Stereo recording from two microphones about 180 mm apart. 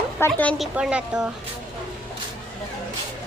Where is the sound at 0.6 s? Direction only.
5° right (ahead or behind).